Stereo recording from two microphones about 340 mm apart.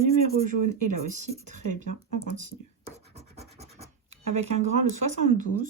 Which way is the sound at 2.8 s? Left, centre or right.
Centre.